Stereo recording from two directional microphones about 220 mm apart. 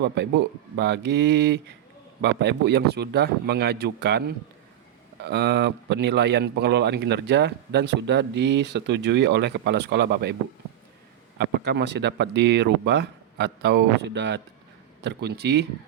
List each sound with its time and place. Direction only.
0.0 s speech: 50° right (ahead or behind)
11.3 s speech: 50° right (ahead or behind)